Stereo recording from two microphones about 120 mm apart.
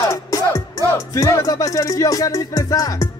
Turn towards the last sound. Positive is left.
turn(degrees=30)  # may be behind; listen again after turning